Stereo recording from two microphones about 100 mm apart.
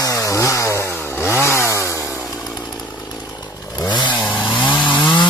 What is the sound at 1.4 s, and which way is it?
Chainsaw, 25° left (ahead or behind).